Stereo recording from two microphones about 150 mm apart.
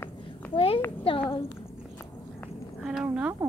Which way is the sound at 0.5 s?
40° left (ahead or behind).